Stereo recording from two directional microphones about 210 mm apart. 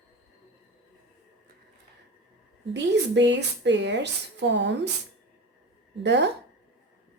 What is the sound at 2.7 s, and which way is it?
A woman's voice, 55° right (ahead or behind).